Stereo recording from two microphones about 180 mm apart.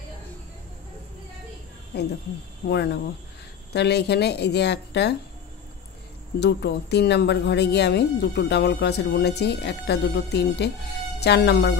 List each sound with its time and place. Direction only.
2.7 s speech: 65° left (ahead or behind)
6.4 s speech: 70° left (ahead or behind)